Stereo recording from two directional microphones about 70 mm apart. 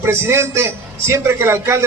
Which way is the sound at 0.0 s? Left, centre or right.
Right.